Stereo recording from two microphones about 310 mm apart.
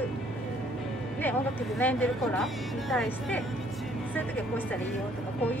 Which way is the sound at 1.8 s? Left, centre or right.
Centre.